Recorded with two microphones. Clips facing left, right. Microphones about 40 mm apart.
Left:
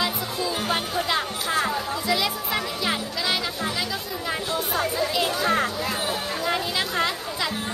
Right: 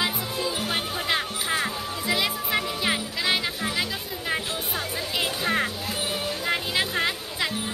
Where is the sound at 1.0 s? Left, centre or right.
Centre.